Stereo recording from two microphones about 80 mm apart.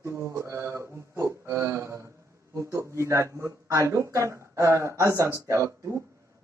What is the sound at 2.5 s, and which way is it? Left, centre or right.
Speech, right.